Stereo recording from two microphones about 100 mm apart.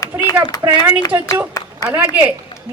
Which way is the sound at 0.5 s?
40° left (ahead or behind).